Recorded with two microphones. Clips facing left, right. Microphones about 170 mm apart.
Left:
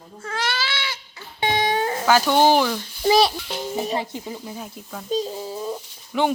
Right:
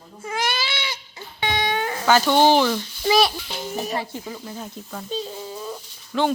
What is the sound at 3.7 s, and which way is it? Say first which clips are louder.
Speech: left 1 dB; 15° left (ahead or behind).